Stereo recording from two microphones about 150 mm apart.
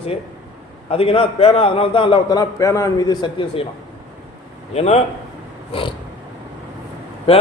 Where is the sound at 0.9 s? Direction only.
40° left (ahead or behind).